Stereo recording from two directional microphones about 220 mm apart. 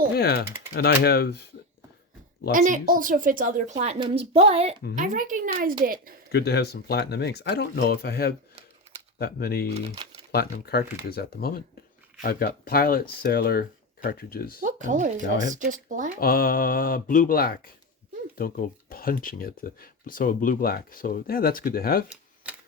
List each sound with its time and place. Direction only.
0.2 s speech: 45° left (ahead or behind)
2.5 s a woman's voice: 35° right (ahead or behind)
6.3 s speech: 50° left (ahead or behind)
9.7 s speech: 25° right (ahead or behind)
10.3 s speech: 45° left (ahead or behind)
14.6 s a woman's voice: 35° right (ahead or behind)
16.2 s speech: 40° left (ahead or behind)